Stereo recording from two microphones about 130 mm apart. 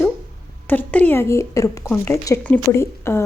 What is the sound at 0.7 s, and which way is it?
A woman's voice, 10° left (ahead or behind).